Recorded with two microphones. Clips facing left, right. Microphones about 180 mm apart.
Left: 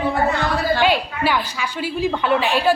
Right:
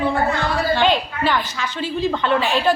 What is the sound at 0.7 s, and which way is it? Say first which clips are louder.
A woman's voice: even; 10° left (ahead or behind).